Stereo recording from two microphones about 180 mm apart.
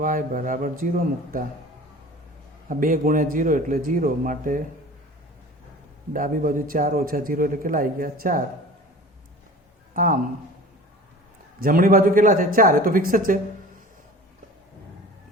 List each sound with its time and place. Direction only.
0.0 s a man's voice: 50° right (ahead or behind)
2.6 s a man's voice: 50° right (ahead or behind)
6.1 s a man's voice: 50° right (ahead or behind)
9.9 s a man's voice: 50° right (ahead or behind)
11.6 s a man's voice: 50° right (ahead or behind)